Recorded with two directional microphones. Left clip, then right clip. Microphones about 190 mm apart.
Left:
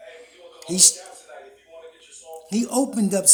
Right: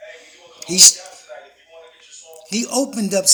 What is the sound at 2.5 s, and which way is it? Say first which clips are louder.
Speech: right 2 dB; 15° left (ahead or behind).